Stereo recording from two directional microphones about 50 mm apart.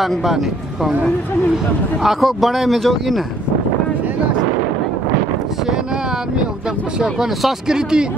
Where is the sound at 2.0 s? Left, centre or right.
Centre.